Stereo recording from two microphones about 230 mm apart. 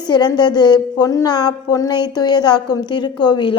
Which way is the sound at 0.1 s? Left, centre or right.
Centre.